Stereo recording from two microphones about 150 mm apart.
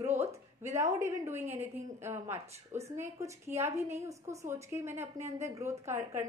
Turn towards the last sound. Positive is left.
turn(degrees=-20)  # may be behind; listen again after turning